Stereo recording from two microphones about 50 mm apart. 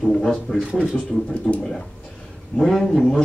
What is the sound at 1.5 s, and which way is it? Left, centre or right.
Speech, centre.